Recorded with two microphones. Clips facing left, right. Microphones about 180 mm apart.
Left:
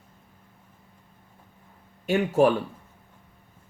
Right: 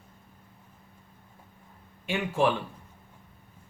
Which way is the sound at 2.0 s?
40° left (ahead or behind).